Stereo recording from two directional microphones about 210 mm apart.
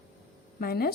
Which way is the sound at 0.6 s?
45° left (ahead or behind).